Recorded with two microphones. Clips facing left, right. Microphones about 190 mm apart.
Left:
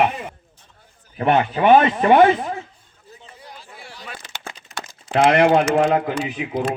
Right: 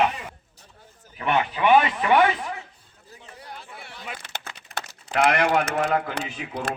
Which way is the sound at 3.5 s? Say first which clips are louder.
Right 1 dB; 60° right (ahead or behind).